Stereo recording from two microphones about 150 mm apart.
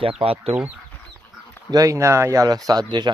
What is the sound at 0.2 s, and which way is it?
Speech, 40° right (ahead or behind).